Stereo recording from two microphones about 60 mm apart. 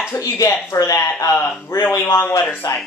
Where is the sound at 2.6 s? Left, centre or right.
Left.